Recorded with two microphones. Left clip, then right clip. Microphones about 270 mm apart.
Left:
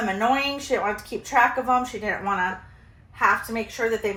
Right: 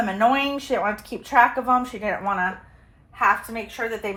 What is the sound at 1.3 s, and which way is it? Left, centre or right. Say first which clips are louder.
A woman's voice: right 2 dB; right.